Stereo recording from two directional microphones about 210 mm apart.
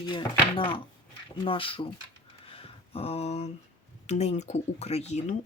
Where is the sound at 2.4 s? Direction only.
25° left (ahead or behind).